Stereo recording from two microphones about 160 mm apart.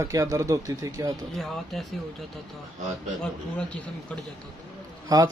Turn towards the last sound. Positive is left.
turn(degrees=-25)  # may be behind; listen again after turning